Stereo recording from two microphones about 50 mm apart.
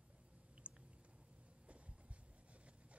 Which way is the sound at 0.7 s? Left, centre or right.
Right.